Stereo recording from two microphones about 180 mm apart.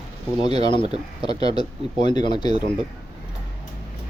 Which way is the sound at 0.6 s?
25° left (ahead or behind).